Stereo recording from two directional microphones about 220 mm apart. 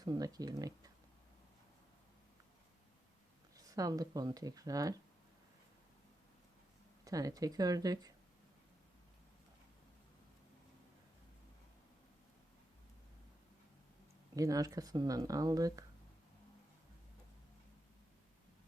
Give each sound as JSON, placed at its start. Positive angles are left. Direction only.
{"t": 0.0, "sound": "speech", "side_deg": -15}
{"t": 3.6, "sound": "speech", "side_deg": -15}
{"t": 7.0, "sound": "speech", "side_deg": -15}
{"t": 14.3, "sound": "speech", "side_deg": -15}